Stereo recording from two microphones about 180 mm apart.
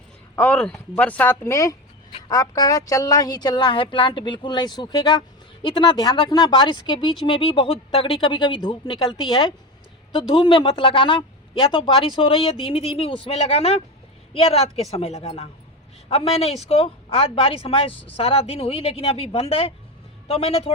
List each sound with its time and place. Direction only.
0.3 s speech: 5° left (ahead or behind); by 20.7 s 35° left (ahead or behind)